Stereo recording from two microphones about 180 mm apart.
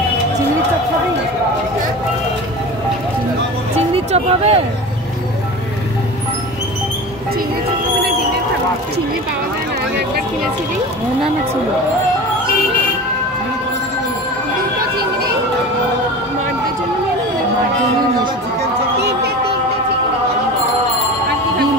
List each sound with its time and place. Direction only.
3.9 s music: 35° right (ahead or behind)
18.9 s music: 65° right (ahead or behind)